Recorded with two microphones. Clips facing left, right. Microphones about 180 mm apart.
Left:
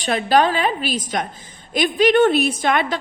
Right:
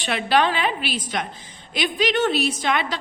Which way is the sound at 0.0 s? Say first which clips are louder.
Left 4 dB; 40° left (ahead or behind).